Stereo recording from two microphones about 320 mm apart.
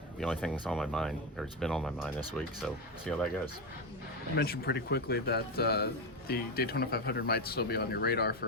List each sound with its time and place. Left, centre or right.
0.2 s speech: centre
4.4 s a man's voice: left